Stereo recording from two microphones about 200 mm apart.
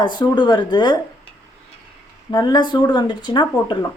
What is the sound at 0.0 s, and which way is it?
Speech, 20° left (ahead or behind).